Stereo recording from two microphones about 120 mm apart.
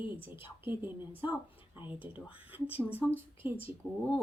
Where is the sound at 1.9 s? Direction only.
15° right (ahead or behind).